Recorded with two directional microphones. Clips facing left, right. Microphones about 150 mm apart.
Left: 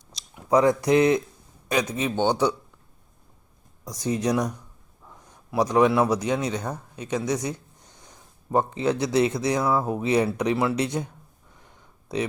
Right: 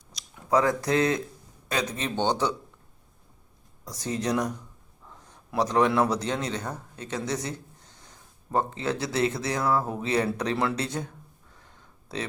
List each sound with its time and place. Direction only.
0.1 s speech: 20° left (ahead or behind)
3.8 s speech: 15° left (ahead or behind)
11.5 s a sound: 15° left (ahead or behind)